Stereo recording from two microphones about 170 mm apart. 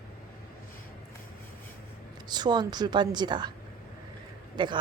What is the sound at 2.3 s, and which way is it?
A woman's voice, 25° right (ahead or behind).